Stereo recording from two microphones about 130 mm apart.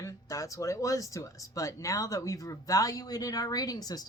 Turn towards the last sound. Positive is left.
turn(degrees=30)  # may be behind; listen again after turning